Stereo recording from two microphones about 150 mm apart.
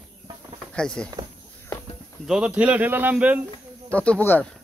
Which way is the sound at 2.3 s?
5° right (ahead or behind).